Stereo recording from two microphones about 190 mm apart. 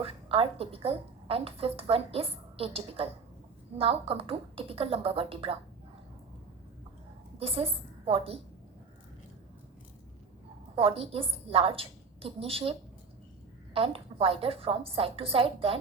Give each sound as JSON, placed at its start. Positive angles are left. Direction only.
{"t": 0.0, "sound": "a woman's voice", "side_deg": -30}
{"t": 7.3, "sound": "a woman's voice", "side_deg": -30}
{"t": 10.8, "sound": "a woman's voice", "side_deg": -30}
{"t": 13.7, "sound": "a woman's voice", "side_deg": -30}